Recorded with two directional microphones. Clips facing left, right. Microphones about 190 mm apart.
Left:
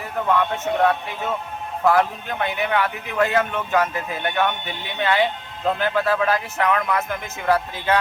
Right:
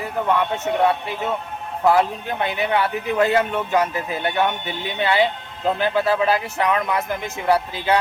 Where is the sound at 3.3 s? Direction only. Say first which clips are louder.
Right 1 dB; 15° right (ahead or behind).